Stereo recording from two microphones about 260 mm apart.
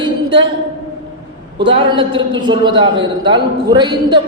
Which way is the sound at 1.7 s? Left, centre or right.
Centre.